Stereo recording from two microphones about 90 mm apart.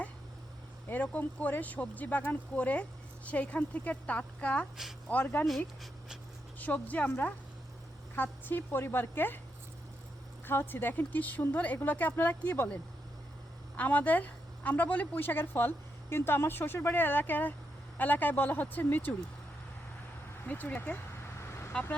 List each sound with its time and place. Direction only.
0.9 s a woman's voice: 20° left (ahead or behind)
5.5 s speech: centre (ahead or behind)
6.6 s speech: 15° left (ahead or behind)
8.1 s a woman's voice: 20° left (ahead or behind)
10.4 s a woman's voice: 25° left (ahead or behind)
20.5 s a woman's voice: 20° left (ahead or behind)